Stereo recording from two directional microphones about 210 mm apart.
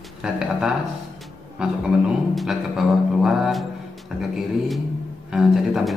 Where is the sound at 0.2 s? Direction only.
5° right (ahead or behind).